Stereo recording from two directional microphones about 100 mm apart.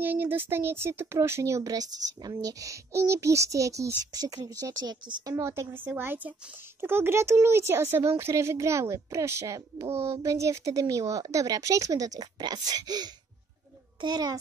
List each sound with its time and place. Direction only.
0.0 s speech: 20° right (ahead or behind); by 5.3 s 45° right (ahead or behind)
5.3 s speech: 30° right (ahead or behind)